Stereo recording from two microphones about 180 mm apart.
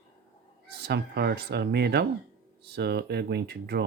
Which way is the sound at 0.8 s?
65° right (ahead or behind).